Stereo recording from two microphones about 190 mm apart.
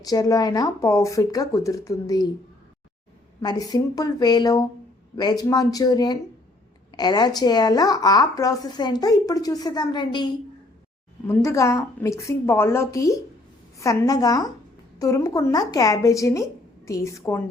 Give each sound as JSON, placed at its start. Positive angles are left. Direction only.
{"t": 0.0, "sound": "speech", "side_deg": 20}
{"t": 3.4, "sound": "a woman's voice", "side_deg": 20}